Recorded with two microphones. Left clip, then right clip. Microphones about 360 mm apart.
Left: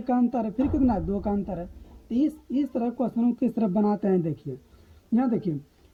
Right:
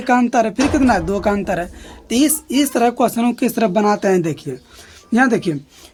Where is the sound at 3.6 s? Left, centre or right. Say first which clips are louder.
Right 12 dB; left.